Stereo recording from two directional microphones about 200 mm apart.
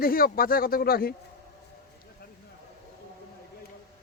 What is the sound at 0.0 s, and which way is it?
Speech, 45° left (ahead or behind).